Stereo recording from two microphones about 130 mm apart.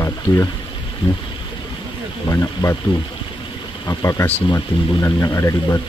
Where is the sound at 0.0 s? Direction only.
25° left (ahead or behind).